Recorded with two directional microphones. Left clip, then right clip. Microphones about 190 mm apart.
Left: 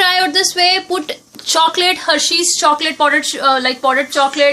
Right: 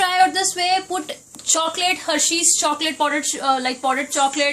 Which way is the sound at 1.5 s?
25° left (ahead or behind).